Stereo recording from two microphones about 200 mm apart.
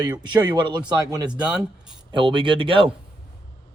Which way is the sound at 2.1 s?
25° right (ahead or behind).